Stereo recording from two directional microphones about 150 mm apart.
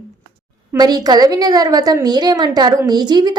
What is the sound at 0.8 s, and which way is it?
A woman's voice, 25° right (ahead or behind).